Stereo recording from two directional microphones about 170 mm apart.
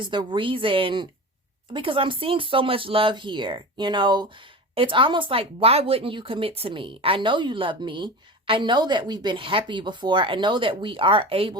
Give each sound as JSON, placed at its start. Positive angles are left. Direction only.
{"t": 0.0, "sound": "speech", "side_deg": -30}